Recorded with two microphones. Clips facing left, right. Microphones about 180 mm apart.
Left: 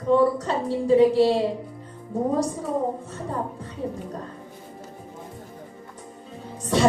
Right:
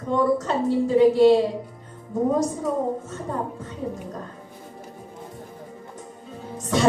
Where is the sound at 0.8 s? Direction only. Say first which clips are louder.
Even; 35° left (ahead or behind).